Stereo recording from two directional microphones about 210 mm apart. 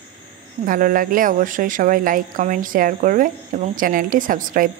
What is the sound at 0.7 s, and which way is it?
A woman's voice, 40° right (ahead or behind).